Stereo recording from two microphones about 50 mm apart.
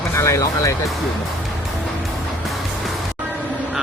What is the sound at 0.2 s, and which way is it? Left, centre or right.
Speech, left.